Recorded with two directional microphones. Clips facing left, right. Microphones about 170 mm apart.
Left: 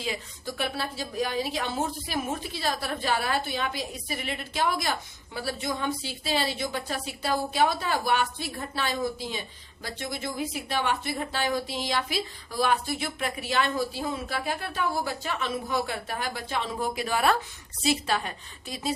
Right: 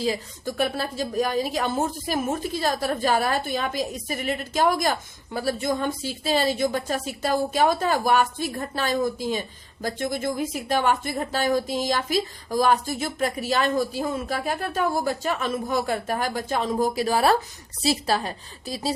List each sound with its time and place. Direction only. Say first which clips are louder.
0.0 s a woman's voice: right 7 dB; 40° right (ahead or behind)